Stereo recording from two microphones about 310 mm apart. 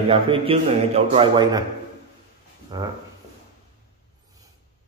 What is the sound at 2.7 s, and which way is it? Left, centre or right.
Speech, centre.